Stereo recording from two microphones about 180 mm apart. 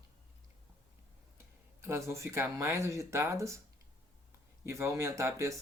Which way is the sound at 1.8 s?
15° right (ahead or behind).